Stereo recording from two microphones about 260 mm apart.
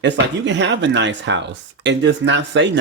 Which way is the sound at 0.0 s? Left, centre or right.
Right.